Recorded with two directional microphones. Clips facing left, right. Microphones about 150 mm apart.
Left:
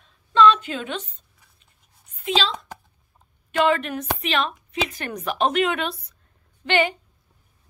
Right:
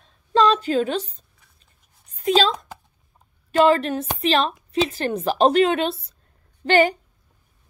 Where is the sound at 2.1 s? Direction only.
45° right (ahead or behind).